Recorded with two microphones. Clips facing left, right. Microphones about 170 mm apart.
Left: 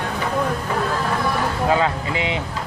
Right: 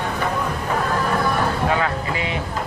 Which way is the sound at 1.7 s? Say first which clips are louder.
Left 2 dB; 20° left (ahead or behind).